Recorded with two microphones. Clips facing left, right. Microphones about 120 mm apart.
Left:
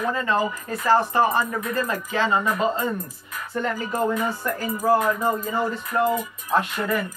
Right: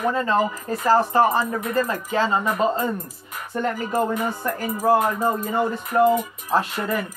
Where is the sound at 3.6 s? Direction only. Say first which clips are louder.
Right 2 dB; 35° right (ahead or behind).